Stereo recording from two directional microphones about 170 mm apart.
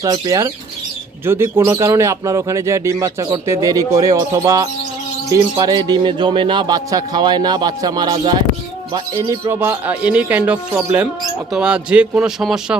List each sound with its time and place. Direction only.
0.0 s speech: 20° right (ahead or behind); by 12.7 s 5° right (ahead or behind)